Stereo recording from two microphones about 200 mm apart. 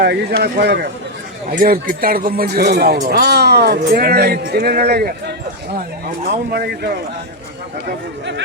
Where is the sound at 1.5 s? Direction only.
45° right (ahead or behind).